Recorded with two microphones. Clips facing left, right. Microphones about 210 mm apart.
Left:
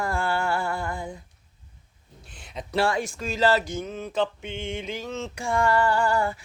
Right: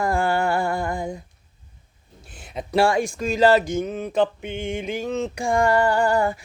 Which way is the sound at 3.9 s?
55° right (ahead or behind).